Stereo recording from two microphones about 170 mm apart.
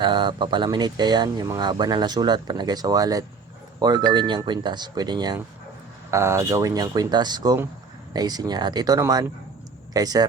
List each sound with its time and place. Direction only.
0.0 s speech: 25° right (ahead or behind)